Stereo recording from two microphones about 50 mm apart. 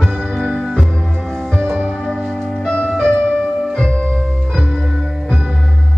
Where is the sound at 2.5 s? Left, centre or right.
Centre.